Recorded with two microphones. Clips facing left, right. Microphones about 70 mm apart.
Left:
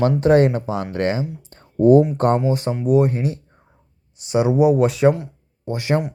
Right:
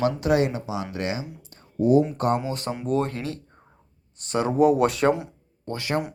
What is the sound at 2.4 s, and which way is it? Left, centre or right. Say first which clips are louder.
Speech: left 8 dB; left.